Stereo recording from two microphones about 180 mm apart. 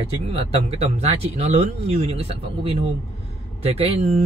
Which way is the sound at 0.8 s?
35° right (ahead or behind).